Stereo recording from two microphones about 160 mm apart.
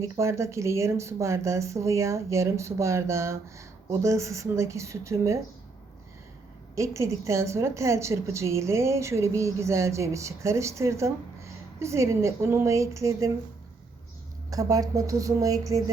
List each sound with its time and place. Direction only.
0.0 s a woman's voice: 20° right (ahead or behind)
6.7 s a woman's voice: 20° right (ahead or behind)
14.5 s speech: 20° right (ahead or behind)